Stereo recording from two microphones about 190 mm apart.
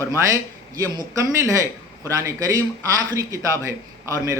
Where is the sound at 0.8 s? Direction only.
20° right (ahead or behind).